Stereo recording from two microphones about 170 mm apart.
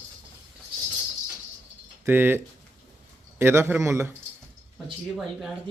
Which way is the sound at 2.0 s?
15° right (ahead or behind).